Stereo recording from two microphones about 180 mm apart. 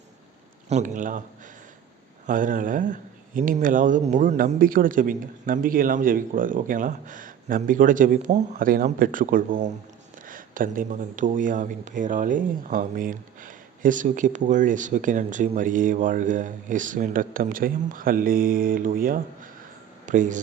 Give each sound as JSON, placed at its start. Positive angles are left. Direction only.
{"t": 0.7, "sound": "speech", "side_deg": -45}
{"t": 2.2, "sound": "speech", "side_deg": -45}